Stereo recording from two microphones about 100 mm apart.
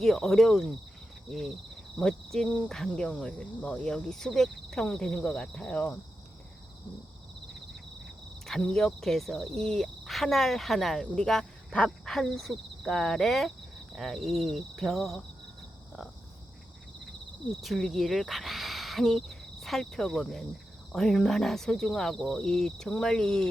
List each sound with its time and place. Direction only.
0.0 s cricket: 5° left (ahead or behind)
8.4 s cricket: 5° left (ahead or behind)
17.5 s speech: centre (ahead or behind)
20.9 s cricket: 5° left (ahead or behind)